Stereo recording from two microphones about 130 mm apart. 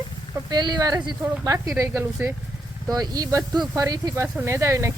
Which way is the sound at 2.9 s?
30° right (ahead or behind).